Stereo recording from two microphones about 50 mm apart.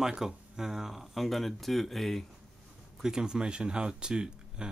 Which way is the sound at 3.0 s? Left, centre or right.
Centre.